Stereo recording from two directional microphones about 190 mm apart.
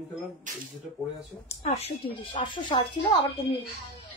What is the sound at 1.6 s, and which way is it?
Speech, 30° left (ahead or behind).